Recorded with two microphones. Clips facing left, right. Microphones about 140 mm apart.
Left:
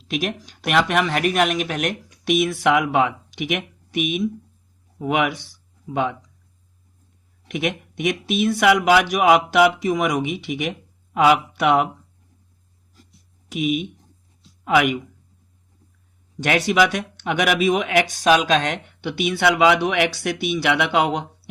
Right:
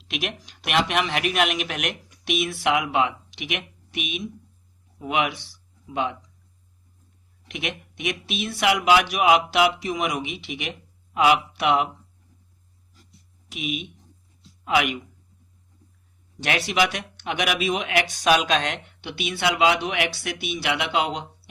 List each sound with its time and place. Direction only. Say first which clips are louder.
0.0 s speech: left 6 dB; 40° left (ahead or behind)
7.4 s speech: left 7 dB; 50° left (ahead or behind)
13.5 s speech: left 8 dB; 45° left (ahead or behind)
16.4 s speech: left 5 dB; 45° left (ahead or behind)